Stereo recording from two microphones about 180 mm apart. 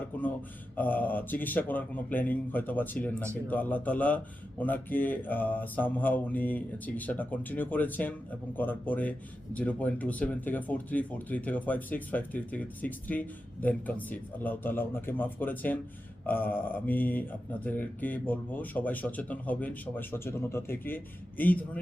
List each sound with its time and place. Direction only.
0.8 s speech: 10° left (ahead or behind)